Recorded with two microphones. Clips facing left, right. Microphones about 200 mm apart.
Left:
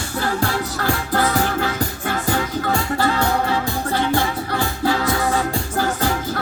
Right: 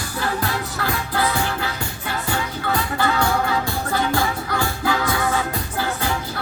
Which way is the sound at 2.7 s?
30° left (ahead or behind).